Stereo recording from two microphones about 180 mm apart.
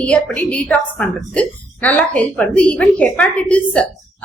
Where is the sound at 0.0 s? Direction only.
5° left (ahead or behind).